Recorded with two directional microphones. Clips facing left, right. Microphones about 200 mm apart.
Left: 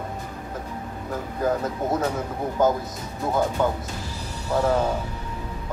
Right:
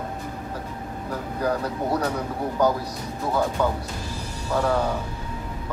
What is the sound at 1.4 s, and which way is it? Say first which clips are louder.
A man's voice: left 1 dB; 20° left (ahead or behind).